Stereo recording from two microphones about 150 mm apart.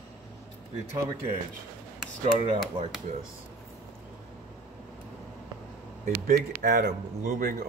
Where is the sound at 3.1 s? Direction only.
50° right (ahead or behind).